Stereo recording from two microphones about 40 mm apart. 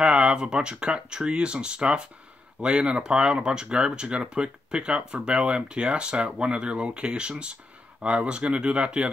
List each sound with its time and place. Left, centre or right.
0.0 s speech: right